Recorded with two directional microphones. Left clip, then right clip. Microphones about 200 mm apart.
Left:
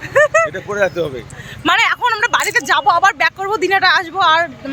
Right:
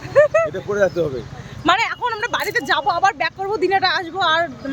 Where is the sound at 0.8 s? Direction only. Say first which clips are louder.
Left 1 dB; 20° right (ahead or behind).